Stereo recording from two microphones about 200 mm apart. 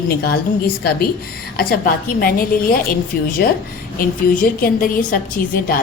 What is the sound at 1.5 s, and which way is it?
A woman's voice, 45° left (ahead or behind).